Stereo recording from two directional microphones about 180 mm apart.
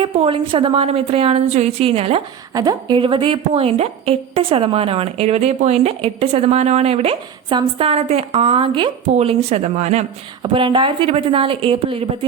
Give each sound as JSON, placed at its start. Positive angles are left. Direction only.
{"t": 0.0, "sound": "a woman's voice", "side_deg": -30}
{"t": 10.4, "sound": "a woman's voice", "side_deg": -25}